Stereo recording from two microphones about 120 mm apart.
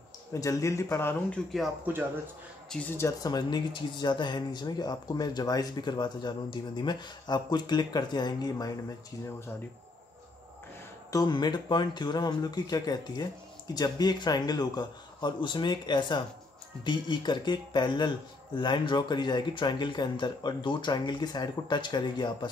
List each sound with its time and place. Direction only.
0.3 s speech: 25° left (ahead or behind)
2.9 s speech: 25° left (ahead or behind)
3.3 s speech: 35° left (ahead or behind)
11.1 s speech: 35° left (ahead or behind)